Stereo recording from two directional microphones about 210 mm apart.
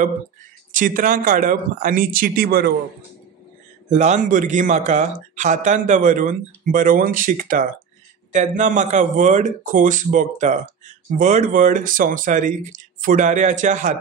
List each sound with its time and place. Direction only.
0.7 s speech: 40° right (ahead or behind)
3.9 s speech: 35° right (ahead or behind)